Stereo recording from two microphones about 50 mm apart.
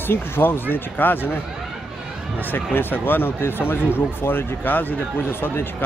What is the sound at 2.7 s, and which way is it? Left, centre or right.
Speech, left.